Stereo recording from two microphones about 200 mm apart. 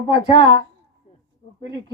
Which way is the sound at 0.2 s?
20° left (ahead or behind).